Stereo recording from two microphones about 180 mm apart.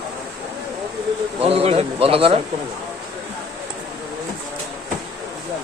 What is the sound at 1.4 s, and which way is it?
Speech, 35° right (ahead or behind).